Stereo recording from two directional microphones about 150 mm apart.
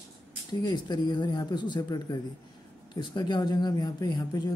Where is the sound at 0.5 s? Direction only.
25° left (ahead or behind).